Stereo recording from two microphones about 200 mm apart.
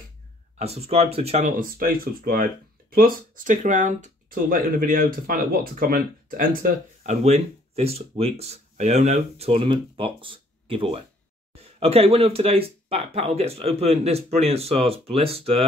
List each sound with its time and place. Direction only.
0.6 s speech: 30° right (ahead or behind)